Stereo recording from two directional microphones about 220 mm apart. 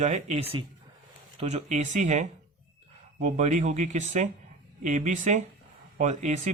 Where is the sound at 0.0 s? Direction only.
30° right (ahead or behind).